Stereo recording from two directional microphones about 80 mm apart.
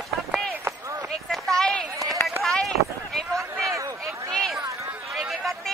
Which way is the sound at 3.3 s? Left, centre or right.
Right.